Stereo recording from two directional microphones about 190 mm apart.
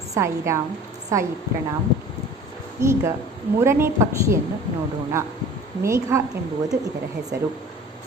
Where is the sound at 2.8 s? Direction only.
15° right (ahead or behind).